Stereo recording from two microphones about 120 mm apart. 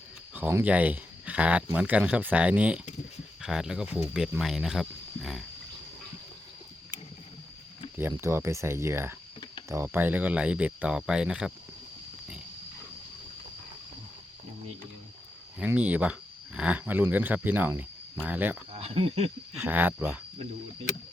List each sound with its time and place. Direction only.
0.3 s speech: 15° right (ahead or behind)
8.2 s speech: 20° right (ahead or behind); by 11.5 s 5° right (ahead or behind)
15.5 s speech: 10° right (ahead or behind)
18.7 s speech: 55° right (ahead or behind)
19.6 s speech: 15° right (ahead or behind)